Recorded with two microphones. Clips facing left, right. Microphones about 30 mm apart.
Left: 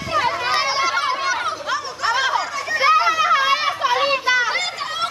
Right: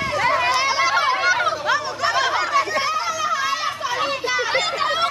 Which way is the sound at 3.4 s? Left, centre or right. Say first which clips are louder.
Left 4 dB; left.